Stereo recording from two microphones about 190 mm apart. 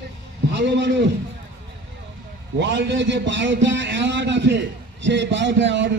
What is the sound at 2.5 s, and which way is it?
A man's voice, 70° right (ahead or behind).